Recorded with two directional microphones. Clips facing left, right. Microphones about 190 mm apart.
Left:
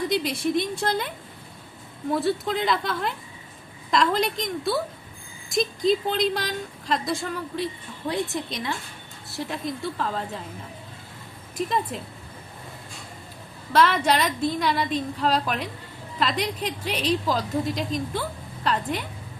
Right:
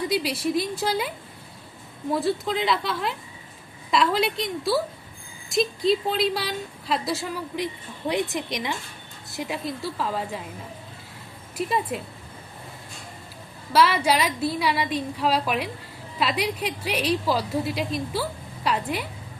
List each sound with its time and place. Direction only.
0.1 s a woman's voice: 5° right (ahead or behind)
11.5 s a woman's voice: 10° right (ahead or behind)
13.7 s a woman's voice: 10° right (ahead or behind)